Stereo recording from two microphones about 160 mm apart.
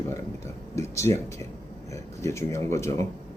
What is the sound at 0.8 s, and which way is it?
A man's voice, 20° left (ahead or behind).